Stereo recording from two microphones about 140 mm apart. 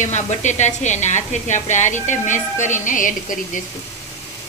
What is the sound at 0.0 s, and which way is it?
A woman's voice, 55° left (ahead or behind).